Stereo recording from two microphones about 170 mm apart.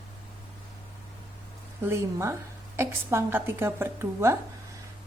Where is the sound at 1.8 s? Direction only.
15° right (ahead or behind).